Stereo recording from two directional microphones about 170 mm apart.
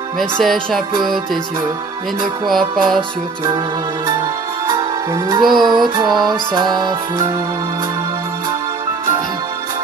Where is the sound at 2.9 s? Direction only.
25° right (ahead or behind).